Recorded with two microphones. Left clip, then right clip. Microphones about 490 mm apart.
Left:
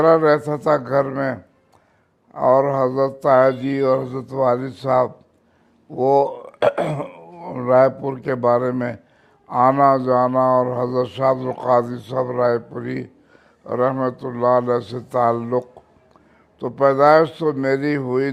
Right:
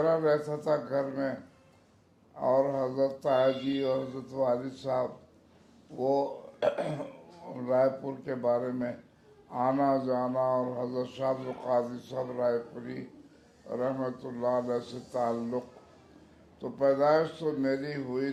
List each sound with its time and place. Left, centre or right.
0.0 s speech: left
2.3 s speech: left